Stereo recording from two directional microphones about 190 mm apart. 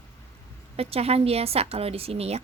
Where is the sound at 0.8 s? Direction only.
30° right (ahead or behind).